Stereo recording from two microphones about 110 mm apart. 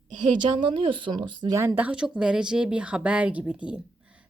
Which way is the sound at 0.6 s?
45° right (ahead or behind).